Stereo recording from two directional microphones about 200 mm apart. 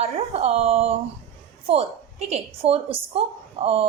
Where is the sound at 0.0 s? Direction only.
30° right (ahead or behind).